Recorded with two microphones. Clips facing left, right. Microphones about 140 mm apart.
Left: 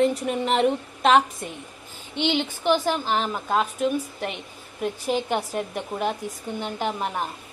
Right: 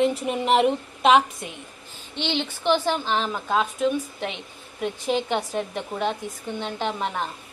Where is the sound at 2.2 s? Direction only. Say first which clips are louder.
Left 3 dB; 10° left (ahead or behind).